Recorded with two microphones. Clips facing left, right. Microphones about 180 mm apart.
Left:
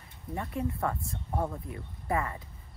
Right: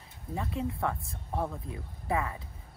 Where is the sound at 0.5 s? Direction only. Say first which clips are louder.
Left 1 dB; 25° right (ahead or behind).